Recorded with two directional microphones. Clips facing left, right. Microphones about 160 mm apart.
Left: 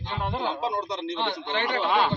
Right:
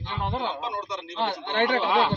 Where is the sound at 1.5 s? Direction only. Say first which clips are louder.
Right 6 dB; 60° right (ahead or behind).